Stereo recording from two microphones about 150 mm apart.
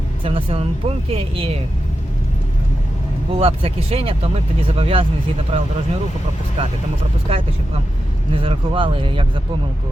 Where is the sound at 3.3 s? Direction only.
40° right (ahead or behind).